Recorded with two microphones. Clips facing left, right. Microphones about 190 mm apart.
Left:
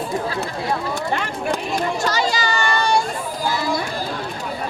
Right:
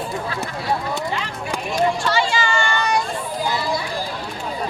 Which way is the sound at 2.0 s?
40° left (ahead or behind).